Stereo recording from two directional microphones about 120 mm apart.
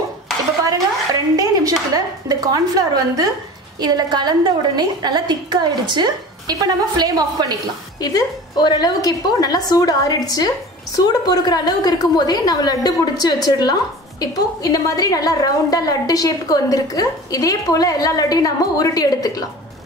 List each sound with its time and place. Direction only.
1.3 s a woman's voice: 30° right (ahead or behind)
8.0 s a woman's voice: 30° left (ahead or behind)